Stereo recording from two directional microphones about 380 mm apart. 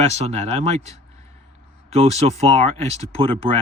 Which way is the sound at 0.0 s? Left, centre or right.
Centre.